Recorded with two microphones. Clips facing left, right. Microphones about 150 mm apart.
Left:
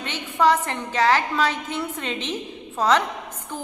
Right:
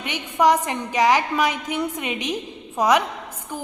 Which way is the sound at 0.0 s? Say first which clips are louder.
Right 1 dB; 15° right (ahead or behind).